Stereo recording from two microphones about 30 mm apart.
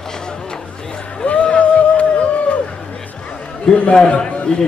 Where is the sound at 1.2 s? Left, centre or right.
Left.